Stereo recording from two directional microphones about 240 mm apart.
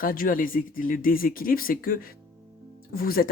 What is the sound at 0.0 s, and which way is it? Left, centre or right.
Speech, left.